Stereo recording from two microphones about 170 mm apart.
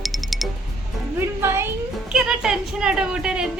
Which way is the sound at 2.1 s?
5° right (ahead or behind).